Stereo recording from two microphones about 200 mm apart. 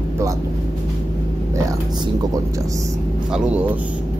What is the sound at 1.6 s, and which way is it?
Speech, 15° right (ahead or behind).